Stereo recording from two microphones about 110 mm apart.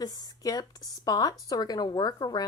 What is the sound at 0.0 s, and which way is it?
Speech, 35° left (ahead or behind).